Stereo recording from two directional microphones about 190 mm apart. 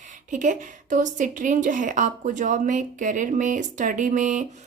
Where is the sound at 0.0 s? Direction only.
40° right (ahead or behind).